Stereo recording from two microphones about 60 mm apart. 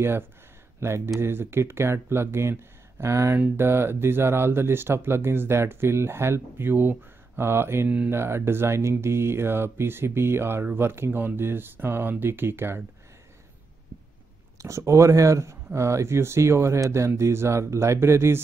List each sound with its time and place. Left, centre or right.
0.7 s speech: right
14.6 s speech: right